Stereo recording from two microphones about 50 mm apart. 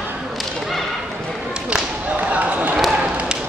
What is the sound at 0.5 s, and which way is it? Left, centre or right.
Whip, centre.